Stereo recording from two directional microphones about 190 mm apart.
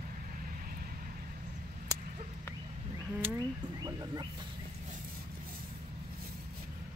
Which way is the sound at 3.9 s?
20° right (ahead or behind).